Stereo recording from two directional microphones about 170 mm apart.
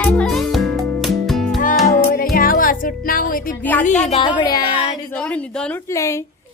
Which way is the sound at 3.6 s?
10° left (ahead or behind).